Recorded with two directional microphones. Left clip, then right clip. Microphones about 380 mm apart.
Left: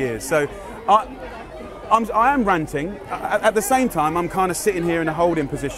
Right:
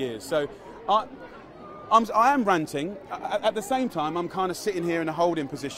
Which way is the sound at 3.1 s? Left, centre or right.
Left.